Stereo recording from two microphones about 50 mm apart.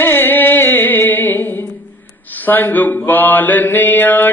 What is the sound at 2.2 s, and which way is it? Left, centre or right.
Mantra, left.